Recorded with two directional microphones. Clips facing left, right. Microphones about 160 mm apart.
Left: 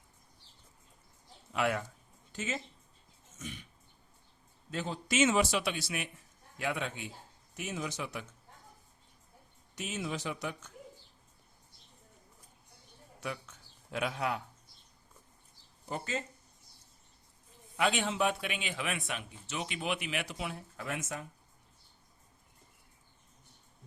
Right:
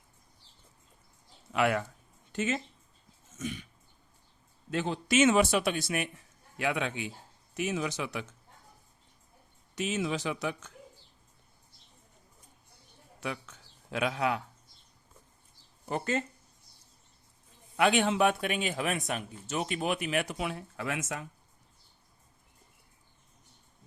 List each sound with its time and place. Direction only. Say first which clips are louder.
1.5 s speech: right 4 dB; 75° right (ahead or behind)
2.3 s speech: right 7 dB; 65° right (ahead or behind)
3.3 s dog: right 8 dB; 90° right
4.7 s a man's voice: right 6 dB; 75° right (ahead or behind); by 6.1 s 55° right (ahead or behind)
6.6 s a man's voice: right 4 dB; 85° right
9.7 s speech: right 6 dB; 90° right
13.1 s bird: right 3 dB; 90° right
13.9 s speech: right 4 dB; 90° right
15.9 s a man's voice: right 6 dB; 65° right (ahead or behind)
17.7 s a man's voice: right 5 dB; 60° right (ahead or behind); by 21.2 s 90° right